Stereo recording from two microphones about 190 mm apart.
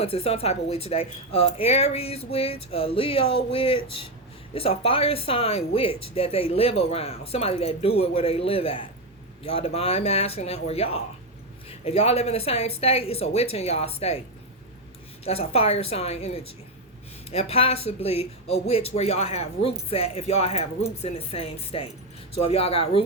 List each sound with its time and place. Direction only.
0.0 s speech: 30° left (ahead or behind)
15.2 s speech: 30° left (ahead or behind)